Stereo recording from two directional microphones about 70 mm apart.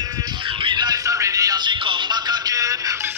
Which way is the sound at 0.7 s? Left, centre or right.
Right.